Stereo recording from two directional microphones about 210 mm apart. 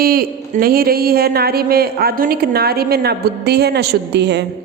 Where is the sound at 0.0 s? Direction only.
45° right (ahead or behind).